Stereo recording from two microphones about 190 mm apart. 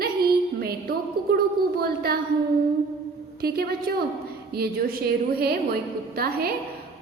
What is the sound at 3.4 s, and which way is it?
A woman's voice, 55° right (ahead or behind).